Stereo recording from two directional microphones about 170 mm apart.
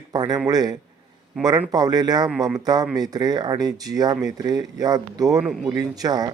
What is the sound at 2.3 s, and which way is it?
Speech, centre (ahead or behind).